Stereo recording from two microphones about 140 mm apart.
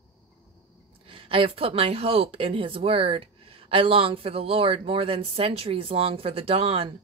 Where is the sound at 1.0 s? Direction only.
40° right (ahead or behind).